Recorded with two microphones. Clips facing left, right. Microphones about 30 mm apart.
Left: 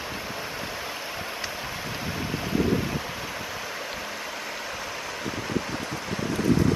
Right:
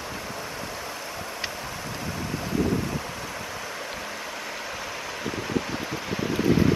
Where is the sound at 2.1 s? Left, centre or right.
Centre.